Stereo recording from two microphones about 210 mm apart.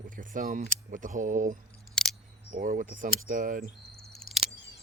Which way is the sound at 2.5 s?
40° right (ahead or behind).